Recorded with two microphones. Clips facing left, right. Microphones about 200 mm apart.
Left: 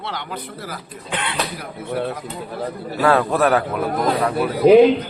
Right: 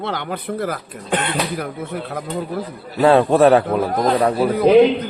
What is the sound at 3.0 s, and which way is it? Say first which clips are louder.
Speech: right 5 dB; 25° right (ahead or behind).